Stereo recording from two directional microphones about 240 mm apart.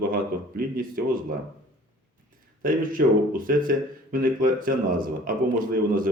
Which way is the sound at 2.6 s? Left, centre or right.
Right.